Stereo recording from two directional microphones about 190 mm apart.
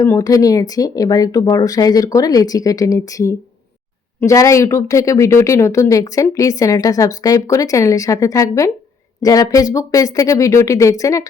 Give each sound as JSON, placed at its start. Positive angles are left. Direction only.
{"t": 0.0, "sound": "speech", "side_deg": 15}